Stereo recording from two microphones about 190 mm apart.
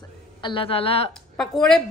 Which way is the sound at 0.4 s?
25° left (ahead or behind).